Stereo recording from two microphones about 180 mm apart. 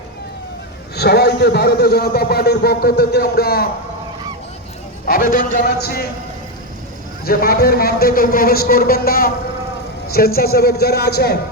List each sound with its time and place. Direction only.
0.9 s a man's voice: 65° left (ahead or behind)
5.0 s a man's voice: 50° left (ahead or behind)
7.3 s a man's voice: 55° left (ahead or behind)